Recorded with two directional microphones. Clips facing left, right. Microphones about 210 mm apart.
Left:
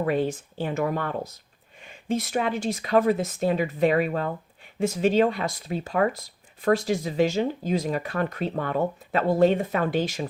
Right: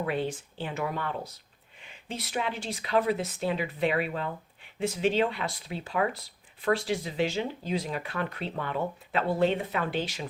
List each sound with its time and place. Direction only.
0.0 s speech: 45° left (ahead or behind)